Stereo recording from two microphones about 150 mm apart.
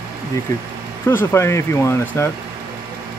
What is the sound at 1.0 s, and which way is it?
Speech, 15° left (ahead or behind).